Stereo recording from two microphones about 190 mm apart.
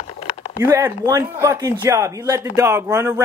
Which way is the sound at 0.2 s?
30° left (ahead or behind).